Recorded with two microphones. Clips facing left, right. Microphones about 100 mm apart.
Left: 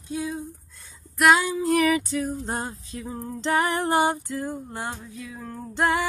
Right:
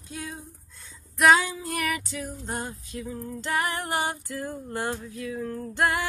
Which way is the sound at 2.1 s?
35° left (ahead or behind).